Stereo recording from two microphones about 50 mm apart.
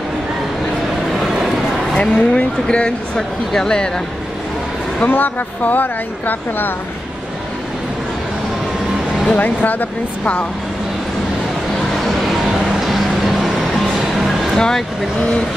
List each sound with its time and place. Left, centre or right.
1.2 s vehicle: centre
2.0 s speech: left
3.2 s speech: centre
5.0 s speech: left
9.3 s speech: left
12.8 s vehicle: centre
14.1 s music: centre